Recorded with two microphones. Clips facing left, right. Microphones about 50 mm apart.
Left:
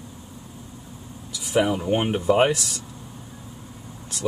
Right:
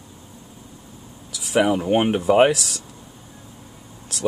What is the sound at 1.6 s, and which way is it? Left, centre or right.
Speech, right.